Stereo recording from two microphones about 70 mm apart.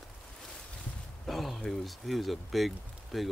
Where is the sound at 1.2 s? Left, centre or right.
Centre.